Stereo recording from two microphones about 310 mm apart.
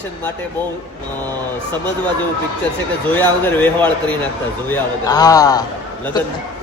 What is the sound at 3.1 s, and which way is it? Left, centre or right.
A man's voice, centre.